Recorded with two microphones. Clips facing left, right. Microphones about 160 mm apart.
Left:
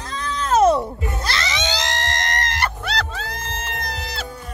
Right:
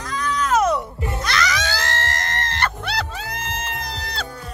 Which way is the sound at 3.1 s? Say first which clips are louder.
Even; 10° right (ahead or behind).